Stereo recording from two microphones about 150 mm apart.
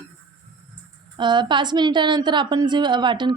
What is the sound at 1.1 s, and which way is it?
A woman's voice, 30° right (ahead or behind).